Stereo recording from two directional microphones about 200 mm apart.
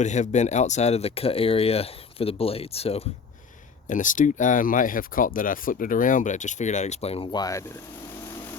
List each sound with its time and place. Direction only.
0.0 s speech: 35° left (ahead or behind)
3.8 s speech: 40° left (ahead or behind); by 7.8 s 15° left (ahead or behind)